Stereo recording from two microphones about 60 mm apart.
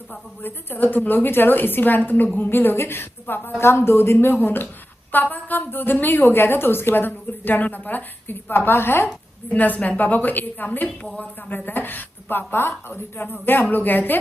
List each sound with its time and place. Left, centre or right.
0.4 s a woman's voice: left
9.5 s a woman's voice: left